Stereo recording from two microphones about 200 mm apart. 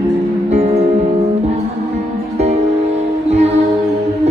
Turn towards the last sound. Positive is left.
turn(degrees=-30)  # may be behind; listen again after turning